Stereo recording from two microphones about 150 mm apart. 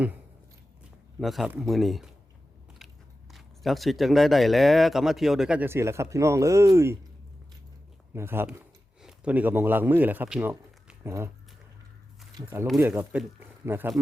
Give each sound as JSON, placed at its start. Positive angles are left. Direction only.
{"t": 1.2, "sound": "speech", "side_deg": 0}
{"t": 3.3, "sound": "speech", "side_deg": 0}
{"t": 8.1, "sound": "a man's voice", "side_deg": -15}
{"t": 10.8, "sound": "a sound", "side_deg": -15}
{"t": 12.6, "sound": "speech", "side_deg": 0}
{"t": 13.7, "sound": "speech", "side_deg": -15}